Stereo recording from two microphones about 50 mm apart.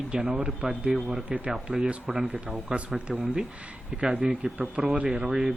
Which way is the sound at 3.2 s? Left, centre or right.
Centre.